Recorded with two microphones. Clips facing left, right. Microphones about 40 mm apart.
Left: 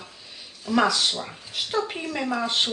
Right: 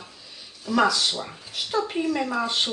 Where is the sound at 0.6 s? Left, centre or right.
Centre.